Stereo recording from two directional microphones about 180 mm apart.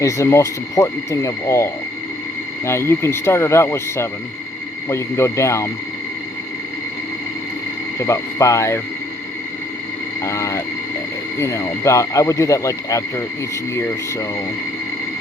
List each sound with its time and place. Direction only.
0.0 s speech: 15° left (ahead or behind)
7.9 s speech: 15° left (ahead or behind)
10.2 s speech: 15° left (ahead or behind)